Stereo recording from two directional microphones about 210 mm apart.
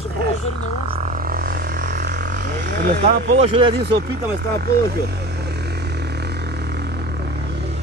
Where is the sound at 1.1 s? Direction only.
45° right (ahead or behind).